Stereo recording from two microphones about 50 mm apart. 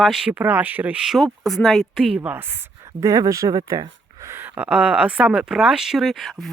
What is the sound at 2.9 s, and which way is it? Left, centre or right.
Speech, right.